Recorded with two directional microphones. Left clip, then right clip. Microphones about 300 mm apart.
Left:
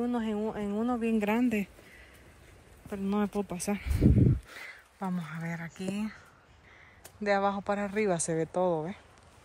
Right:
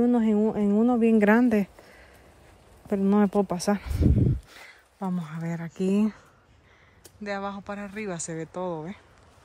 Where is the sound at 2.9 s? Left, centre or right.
Right.